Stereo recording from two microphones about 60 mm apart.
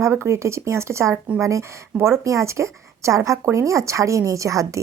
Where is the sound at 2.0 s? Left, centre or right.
Right.